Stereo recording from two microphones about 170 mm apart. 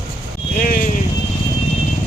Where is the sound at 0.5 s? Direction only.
55° left (ahead or behind).